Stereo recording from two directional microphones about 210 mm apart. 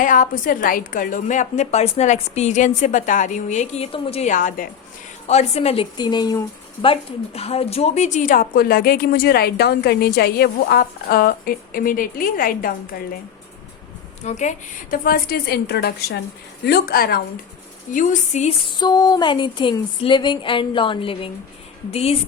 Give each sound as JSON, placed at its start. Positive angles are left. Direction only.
{"t": 0.0, "sound": "a woman's voice", "side_deg": 40}
{"t": 14.3, "sound": "a woman's voice", "side_deg": 35}
{"t": 18.8, "sound": "speech", "side_deg": 20}